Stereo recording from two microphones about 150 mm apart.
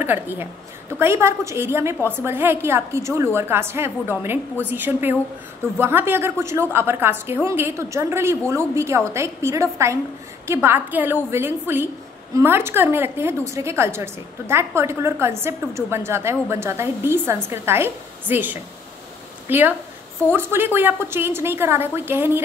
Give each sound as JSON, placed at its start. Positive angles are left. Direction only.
{"t": 0.0, "sound": "a woman's voice", "side_deg": -15}